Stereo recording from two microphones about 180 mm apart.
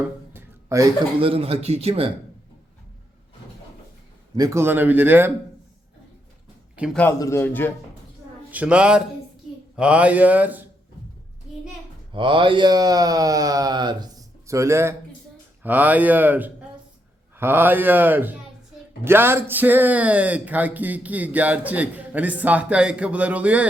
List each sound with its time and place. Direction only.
0.0 s a sound: 15° right (ahead or behind)
1.2 s speech: 30° right (ahead or behind)
4.4 s speech: 15° right (ahead or behind)
6.9 s a man's voice: 15° left (ahead or behind)
8.4 s a man's voice: 10° right (ahead or behind)
12.1 s a sound: 30° right (ahead or behind)
15.6 s speech: 10° right (ahead or behind)